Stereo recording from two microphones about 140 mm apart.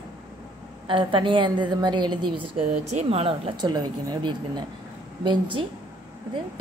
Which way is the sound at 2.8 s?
50° right (ahead or behind).